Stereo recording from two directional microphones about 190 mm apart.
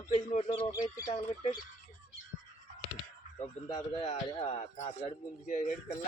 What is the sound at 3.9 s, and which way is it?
Speech, 35° left (ahead or behind).